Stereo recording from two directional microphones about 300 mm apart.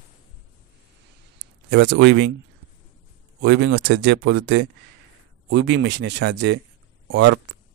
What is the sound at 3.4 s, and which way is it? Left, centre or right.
A man's voice, right.